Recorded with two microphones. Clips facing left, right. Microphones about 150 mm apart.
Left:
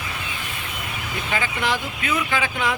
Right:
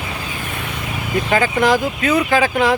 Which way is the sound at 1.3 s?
45° right (ahead or behind).